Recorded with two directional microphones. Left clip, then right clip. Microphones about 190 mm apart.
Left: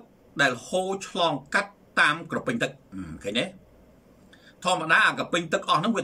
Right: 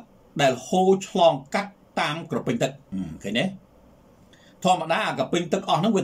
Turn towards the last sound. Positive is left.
turn(degrees=-15)  # may be behind; listen again after turning